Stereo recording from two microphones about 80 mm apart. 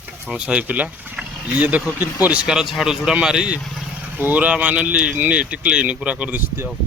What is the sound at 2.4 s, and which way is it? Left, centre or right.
Speech, centre.